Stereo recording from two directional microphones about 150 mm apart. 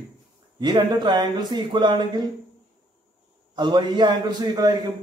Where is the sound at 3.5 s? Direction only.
30° right (ahead or behind).